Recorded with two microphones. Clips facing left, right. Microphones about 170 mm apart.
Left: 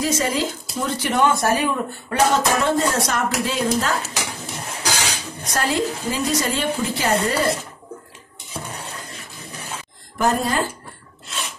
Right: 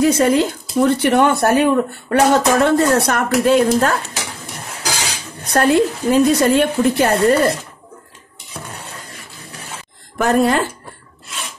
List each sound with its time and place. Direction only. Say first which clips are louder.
0.0 s speech: right 8 dB; 60° right (ahead or behind)
5.5 s speech: right 8 dB; 60° right (ahead or behind)
10.1 s a woman's voice: right 6 dB; 70° right (ahead or behind)